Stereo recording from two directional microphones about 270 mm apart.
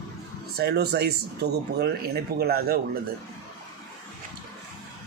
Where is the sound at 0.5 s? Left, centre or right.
Right.